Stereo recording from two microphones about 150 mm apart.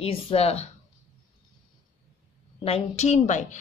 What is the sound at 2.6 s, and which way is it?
Speech, 45° left (ahead or behind).